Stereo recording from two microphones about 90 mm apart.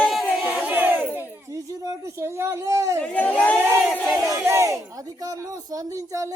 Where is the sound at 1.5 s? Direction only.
35° right (ahead or behind).